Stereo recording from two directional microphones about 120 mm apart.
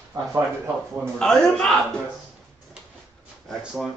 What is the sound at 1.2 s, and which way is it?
Speech, 5° left (ahead or behind).